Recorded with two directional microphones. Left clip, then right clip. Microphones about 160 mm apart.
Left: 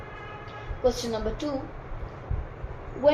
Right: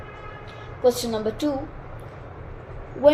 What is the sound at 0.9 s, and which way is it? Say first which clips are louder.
Speech: right 5 dB; 55° right (ahead or behind).